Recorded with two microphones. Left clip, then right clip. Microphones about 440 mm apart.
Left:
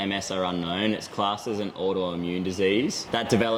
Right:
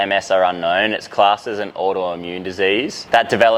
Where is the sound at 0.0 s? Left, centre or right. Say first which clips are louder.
Right 13 dB; right.